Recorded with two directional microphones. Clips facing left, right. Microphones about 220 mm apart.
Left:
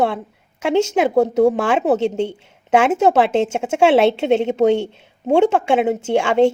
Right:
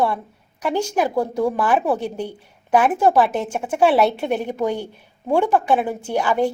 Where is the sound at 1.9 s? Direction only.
25° left (ahead or behind).